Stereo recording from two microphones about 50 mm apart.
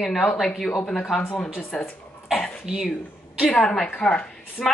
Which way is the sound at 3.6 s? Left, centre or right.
Centre.